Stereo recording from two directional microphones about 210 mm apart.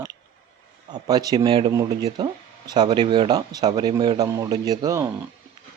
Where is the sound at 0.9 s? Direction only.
20° right (ahead or behind).